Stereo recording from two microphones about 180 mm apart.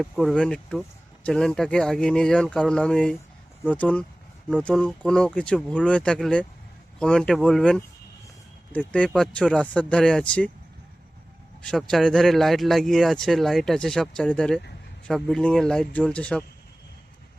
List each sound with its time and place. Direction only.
0.0 s speech: centre (ahead or behind)
11.6 s speech: centre (ahead or behind)